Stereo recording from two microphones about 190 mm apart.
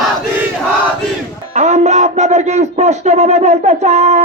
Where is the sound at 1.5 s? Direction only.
35° right (ahead or behind).